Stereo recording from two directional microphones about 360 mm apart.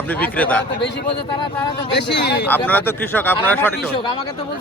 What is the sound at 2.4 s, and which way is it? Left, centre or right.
A man's voice, centre.